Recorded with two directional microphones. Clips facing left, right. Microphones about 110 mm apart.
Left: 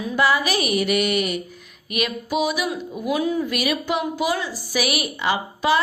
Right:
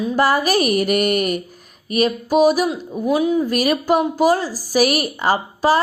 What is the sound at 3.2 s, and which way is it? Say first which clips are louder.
Speech: right 5 dB; 20° right (ahead or behind).